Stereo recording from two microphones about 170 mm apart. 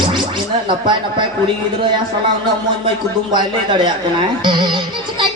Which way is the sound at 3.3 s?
25° right (ahead or behind).